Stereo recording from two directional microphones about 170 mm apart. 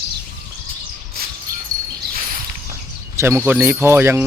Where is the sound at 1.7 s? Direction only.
55° right (ahead or behind).